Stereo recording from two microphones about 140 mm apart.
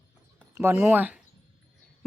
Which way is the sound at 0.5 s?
20° right (ahead or behind).